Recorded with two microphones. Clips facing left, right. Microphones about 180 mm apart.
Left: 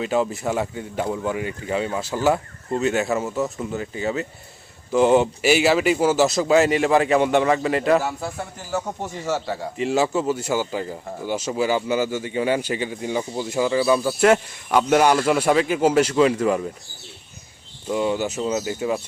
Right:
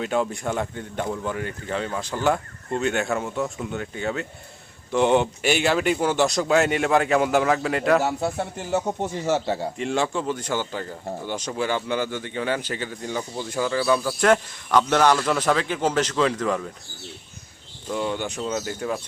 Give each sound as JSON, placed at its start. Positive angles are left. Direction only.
{"t": 0.0, "sound": "speech", "side_deg": 0}
{"t": 8.0, "sound": "speech", "side_deg": -25}
{"t": 9.7, "sound": "speech", "side_deg": 5}
{"t": 17.8, "sound": "speech", "side_deg": 10}